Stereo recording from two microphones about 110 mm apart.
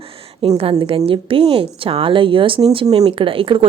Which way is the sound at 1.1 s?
55° right (ahead or behind).